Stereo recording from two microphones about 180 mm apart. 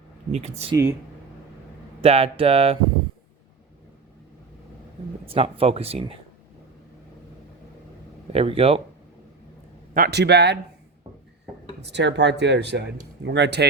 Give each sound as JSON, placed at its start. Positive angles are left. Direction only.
{"t": 0.3, "sound": "speech", "side_deg": -35}
{"t": 2.0, "sound": "speech", "side_deg": -35}
{"t": 5.2, "sound": "speech", "side_deg": -30}
{"t": 8.3, "sound": "speech", "side_deg": -30}
{"t": 9.9, "sound": "speech", "side_deg": -60}
{"t": 11.8, "sound": "speech", "side_deg": -75}